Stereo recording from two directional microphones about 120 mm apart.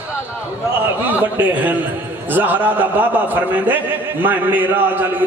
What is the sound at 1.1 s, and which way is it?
A man's voice, 15° right (ahead or behind).